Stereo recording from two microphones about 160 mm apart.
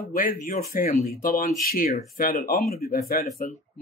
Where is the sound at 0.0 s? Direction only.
65° left (ahead or behind).